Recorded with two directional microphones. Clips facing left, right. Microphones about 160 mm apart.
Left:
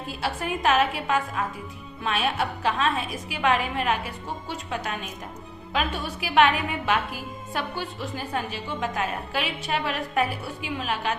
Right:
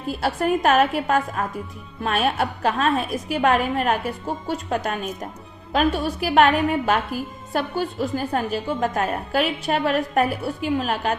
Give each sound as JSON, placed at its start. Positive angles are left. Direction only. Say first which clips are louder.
{"t": 0.1, "sound": "a woman's voice", "louder": "right 8 dB", "side_deg": -45}